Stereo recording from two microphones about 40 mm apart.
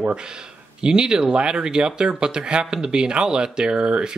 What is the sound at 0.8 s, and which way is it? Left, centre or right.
Speech, centre.